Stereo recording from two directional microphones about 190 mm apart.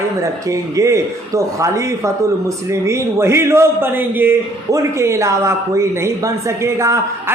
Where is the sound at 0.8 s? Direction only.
15° right (ahead or behind).